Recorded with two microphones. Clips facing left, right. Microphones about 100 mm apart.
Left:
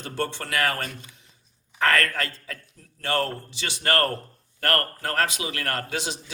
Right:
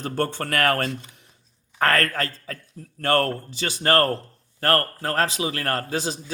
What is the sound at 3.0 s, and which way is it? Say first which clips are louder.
Speech: right 5 dB; 50° right (ahead or behind).